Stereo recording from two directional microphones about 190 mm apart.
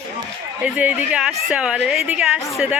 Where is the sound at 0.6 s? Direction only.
5° right (ahead or behind).